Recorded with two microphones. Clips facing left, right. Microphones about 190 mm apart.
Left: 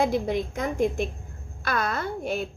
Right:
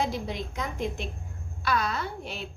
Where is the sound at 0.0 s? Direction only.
50° left (ahead or behind).